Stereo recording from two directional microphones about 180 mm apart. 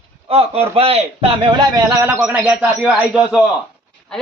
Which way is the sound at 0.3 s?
35° right (ahead or behind).